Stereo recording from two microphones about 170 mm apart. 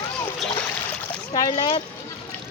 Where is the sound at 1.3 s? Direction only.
25° left (ahead or behind).